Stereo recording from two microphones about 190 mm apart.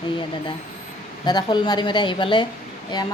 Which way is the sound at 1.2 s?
20° left (ahead or behind).